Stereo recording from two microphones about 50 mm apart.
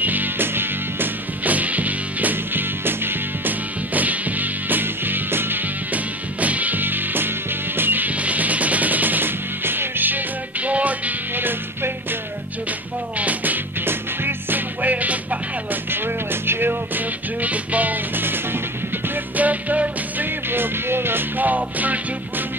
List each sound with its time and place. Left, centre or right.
0.0 s music: right
2.8 s music: right
6.4 s music: right
11.3 s music: right
13.2 s music: right
13.8 s music: right
14.8 s music: right
16.4 s music: right
19.3 s music: right
20.5 s music: right